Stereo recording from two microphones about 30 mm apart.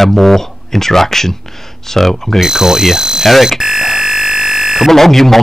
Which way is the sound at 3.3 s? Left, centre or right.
Centre.